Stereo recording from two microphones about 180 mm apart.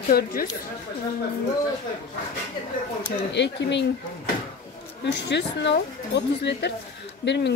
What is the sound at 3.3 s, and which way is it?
Speech, 75° left (ahead or behind).